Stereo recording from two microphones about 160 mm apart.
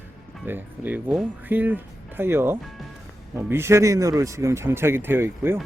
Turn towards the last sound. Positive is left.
turn(degrees=-15)  # may be behind; listen again after turning